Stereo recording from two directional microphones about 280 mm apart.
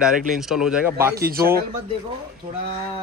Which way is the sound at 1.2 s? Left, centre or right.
Right.